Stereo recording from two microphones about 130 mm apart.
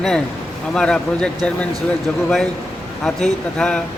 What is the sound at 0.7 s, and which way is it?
Speech, 5° left (ahead or behind).